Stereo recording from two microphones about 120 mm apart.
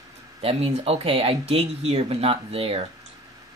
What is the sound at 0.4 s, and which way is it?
Speech, 55° right (ahead or behind).